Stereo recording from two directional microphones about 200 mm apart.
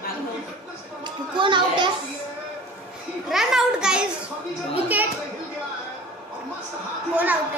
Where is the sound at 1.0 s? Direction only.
25° right (ahead or behind).